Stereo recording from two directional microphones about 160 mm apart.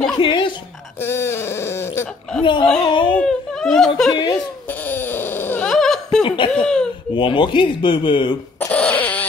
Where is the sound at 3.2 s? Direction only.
5° left (ahead or behind).